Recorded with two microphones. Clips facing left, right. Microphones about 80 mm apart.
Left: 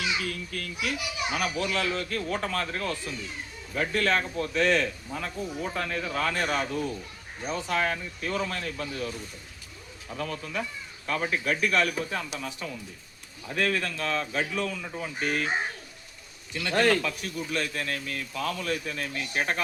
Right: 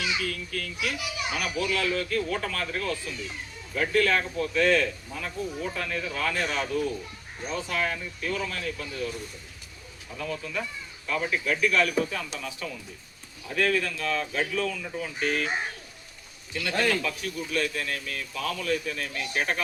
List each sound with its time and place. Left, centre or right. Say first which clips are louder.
0.3 s speech: right 1 dB; left
10.2 s speech: even; left
14.3 s speech: right 1 dB; left
16.7 s speech: left 3 dB; left
17.0 s speech: right 1 dB; left